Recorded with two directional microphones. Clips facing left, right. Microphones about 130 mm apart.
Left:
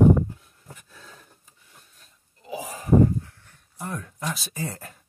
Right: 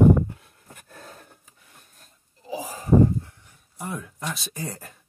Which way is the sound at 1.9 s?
40° right (ahead or behind).